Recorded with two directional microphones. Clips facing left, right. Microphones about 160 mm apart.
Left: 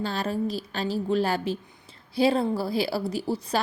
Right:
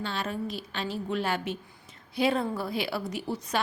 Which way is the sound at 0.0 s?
35° left (ahead or behind).